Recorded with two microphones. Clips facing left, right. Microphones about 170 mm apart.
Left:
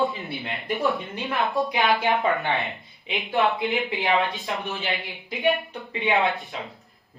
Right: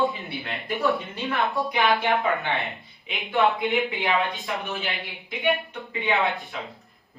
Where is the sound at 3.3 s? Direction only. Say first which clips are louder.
Right 1 dB; centre (ahead or behind).